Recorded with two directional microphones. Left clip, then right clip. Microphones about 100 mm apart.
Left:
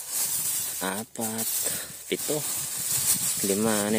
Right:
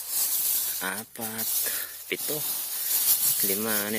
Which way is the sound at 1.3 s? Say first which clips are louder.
Right 1 dB; centre (ahead or behind).